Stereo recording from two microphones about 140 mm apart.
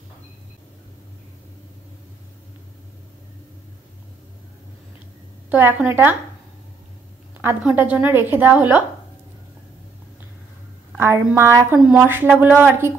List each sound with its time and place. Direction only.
5.5 s a woman's voice: 15° right (ahead or behind)
7.4 s a woman's voice: 10° right (ahead or behind)
11.3 s a sound: 20° right (ahead or behind)
11.8 s a woman's voice: 10° right (ahead or behind)